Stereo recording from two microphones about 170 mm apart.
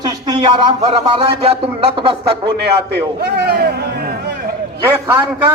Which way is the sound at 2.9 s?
70° right (ahead or behind).